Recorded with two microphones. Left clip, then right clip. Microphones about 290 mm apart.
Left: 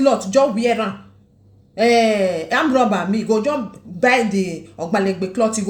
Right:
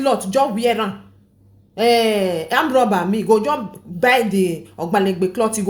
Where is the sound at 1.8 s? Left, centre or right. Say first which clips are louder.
Left 1 dB; right.